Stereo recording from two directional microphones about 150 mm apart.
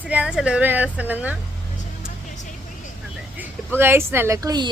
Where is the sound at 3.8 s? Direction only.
15° right (ahead or behind).